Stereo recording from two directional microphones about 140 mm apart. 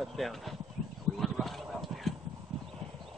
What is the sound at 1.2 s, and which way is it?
Clip-clop, centre (ahead or behind).